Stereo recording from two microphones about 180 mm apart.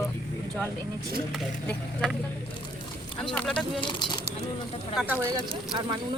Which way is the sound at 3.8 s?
25° left (ahead or behind).